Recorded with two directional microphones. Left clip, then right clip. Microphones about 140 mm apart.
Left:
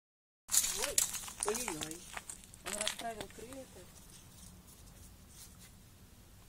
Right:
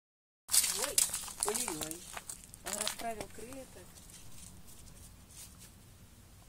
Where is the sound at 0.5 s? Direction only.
5° right (ahead or behind).